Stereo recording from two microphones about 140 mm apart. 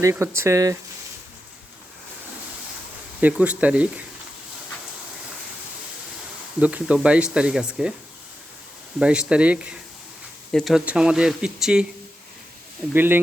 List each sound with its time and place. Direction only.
0.0 s speech: 20° right (ahead or behind)
3.2 s speech: 10° right (ahead or behind)
6.6 s speech: 10° right (ahead or behind)
9.0 s speech: 5° right (ahead or behind)
12.9 s speech: 15° right (ahead or behind)